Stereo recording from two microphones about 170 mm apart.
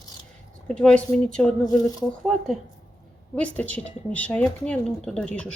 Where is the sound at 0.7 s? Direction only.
5° left (ahead or behind).